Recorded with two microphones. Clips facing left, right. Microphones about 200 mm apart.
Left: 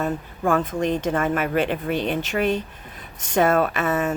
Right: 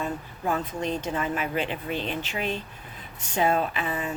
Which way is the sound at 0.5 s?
90° left.